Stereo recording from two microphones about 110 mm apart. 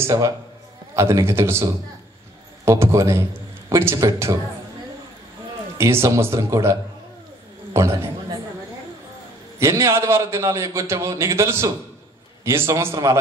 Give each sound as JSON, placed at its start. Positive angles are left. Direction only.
{"t": 0.0, "sound": "a man's voice", "side_deg": -30}
{"t": 5.8, "sound": "a man's voice", "side_deg": -25}
{"t": 9.6, "sound": "a man's voice", "side_deg": -25}